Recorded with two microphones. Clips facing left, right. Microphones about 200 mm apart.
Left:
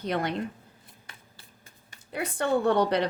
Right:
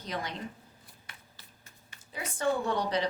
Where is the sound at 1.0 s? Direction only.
30° left (ahead or behind).